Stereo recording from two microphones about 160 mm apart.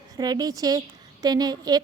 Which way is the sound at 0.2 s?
25° right (ahead or behind).